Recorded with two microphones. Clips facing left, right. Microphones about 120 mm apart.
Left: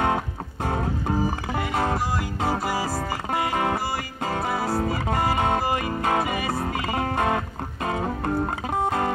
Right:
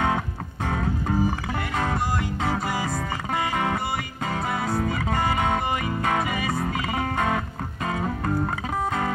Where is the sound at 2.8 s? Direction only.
30° left (ahead or behind).